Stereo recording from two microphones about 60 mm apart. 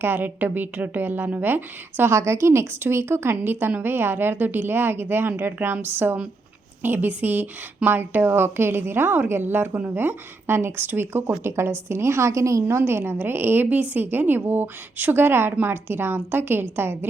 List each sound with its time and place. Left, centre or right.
0.0 s a woman's voice: right
2.1 s a woman's voice: right
12.6 s a woman's voice: right